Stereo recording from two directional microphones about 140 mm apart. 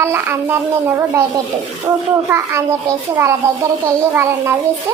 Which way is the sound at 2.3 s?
20° right (ahead or behind).